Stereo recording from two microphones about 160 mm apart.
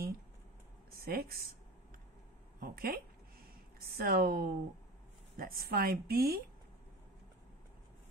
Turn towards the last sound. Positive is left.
turn(degrees=-70)  # may be behind; listen again after turning